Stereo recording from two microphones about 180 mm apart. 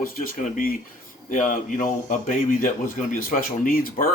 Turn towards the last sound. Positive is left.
turn(degrees=50)  # may be behind; listen again after turning